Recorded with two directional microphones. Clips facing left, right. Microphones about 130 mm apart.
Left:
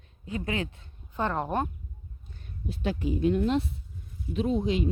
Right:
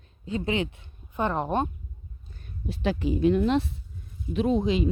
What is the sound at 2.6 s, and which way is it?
Speech, 85° right.